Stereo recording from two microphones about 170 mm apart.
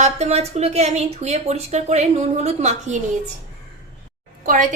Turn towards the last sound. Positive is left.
turn(degrees=-50)  # may be behind; listen again after turning